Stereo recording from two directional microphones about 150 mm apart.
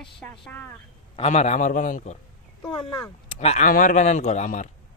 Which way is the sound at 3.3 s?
50° left (ahead or behind).